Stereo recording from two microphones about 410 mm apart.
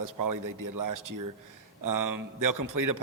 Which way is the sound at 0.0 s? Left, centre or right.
Right.